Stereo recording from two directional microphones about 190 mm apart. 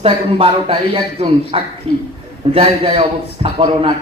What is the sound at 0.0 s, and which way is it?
A man's voice, 25° right (ahead or behind).